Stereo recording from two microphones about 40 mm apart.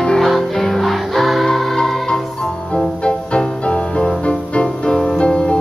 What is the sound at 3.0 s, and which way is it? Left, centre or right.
Music, left.